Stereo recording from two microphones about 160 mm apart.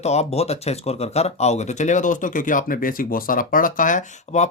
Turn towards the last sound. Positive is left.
turn(degrees=55)  # may be behind; listen again after turning